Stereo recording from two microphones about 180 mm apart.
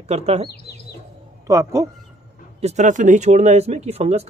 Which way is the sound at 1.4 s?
20° right (ahead or behind).